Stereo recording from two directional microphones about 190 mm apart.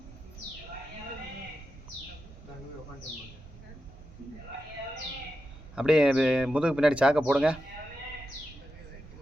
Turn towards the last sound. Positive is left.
turn(degrees=-5)  # may be behind; listen again after turning